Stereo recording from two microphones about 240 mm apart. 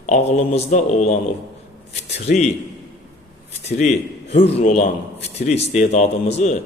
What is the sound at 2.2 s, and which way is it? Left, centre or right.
Speech, left.